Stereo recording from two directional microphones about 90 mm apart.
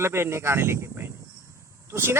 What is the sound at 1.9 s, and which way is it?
Speech, 25° right (ahead or behind).